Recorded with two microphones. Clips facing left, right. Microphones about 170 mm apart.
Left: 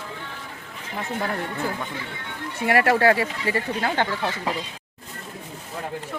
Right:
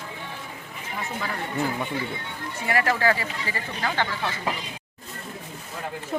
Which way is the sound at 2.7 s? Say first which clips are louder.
Left 5 dB; 60° left (ahead or behind).